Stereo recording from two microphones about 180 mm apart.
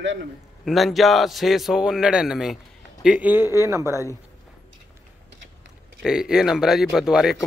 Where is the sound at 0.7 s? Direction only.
Centre (ahead or behind); by 4.0 s 15° right (ahead or behind).